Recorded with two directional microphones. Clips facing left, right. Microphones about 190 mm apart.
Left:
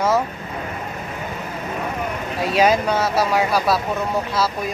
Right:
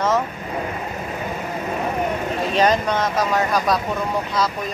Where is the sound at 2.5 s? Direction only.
10° left (ahead or behind).